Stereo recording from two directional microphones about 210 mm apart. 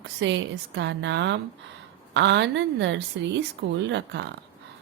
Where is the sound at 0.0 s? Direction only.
60° right (ahead or behind).